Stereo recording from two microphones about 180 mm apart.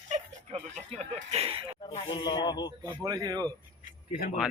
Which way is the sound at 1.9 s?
30° left (ahead or behind).